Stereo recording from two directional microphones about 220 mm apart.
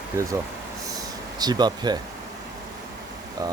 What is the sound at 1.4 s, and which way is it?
Speech, 20° right (ahead or behind).